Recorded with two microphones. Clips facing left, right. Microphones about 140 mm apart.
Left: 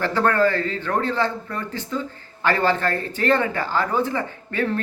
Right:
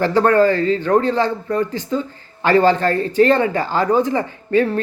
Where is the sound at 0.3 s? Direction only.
15° right (ahead or behind).